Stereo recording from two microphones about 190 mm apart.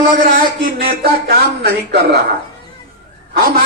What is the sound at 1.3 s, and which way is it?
Speech, 55° right (ahead or behind).